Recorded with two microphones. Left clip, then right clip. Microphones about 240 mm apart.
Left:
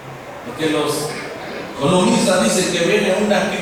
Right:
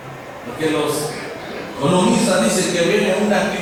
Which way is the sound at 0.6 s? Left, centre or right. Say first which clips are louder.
Even; centre.